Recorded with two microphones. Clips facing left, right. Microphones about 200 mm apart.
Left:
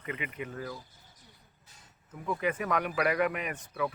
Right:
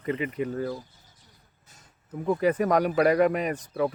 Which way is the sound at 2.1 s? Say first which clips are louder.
Right 8 dB; 35° right (ahead or behind).